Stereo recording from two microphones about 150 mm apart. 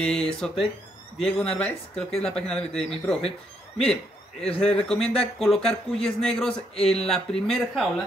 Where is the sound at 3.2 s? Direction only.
45° left (ahead or behind).